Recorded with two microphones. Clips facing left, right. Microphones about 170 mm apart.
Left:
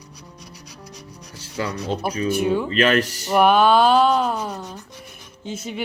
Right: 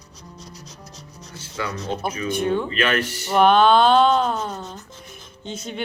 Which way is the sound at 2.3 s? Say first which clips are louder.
Left 1 dB; 5° left (ahead or behind).